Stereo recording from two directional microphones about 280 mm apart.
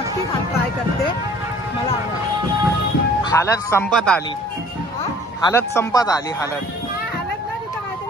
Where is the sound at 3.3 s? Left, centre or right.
Centre.